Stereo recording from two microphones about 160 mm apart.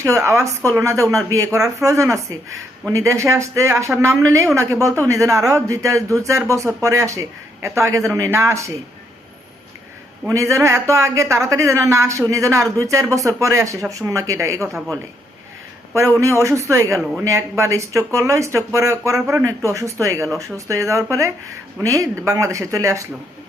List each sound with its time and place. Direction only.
0.0 s a man's voice: 15° right (ahead or behind)
10.2 s a man's voice: 20° right (ahead or behind)
16.2 s speech: 20° right (ahead or behind)